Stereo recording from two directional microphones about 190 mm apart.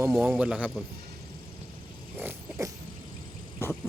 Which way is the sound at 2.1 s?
15° right (ahead or behind).